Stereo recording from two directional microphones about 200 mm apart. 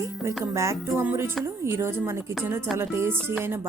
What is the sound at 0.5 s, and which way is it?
A woman's voice, 15° right (ahead or behind).